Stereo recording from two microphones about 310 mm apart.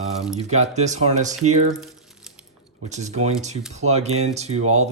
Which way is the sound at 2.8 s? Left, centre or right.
Right.